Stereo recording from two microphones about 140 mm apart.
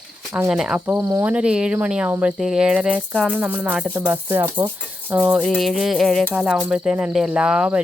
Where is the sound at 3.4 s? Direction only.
10° right (ahead or behind).